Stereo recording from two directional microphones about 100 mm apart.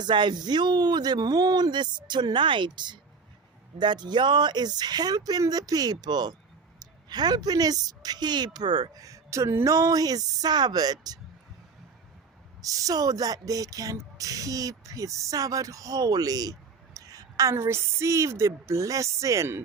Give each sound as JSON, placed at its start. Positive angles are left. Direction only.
{"t": 0.0, "sound": "a woman's voice", "side_deg": -50}
{"t": 12.6, "sound": "a woman's voice", "side_deg": -35}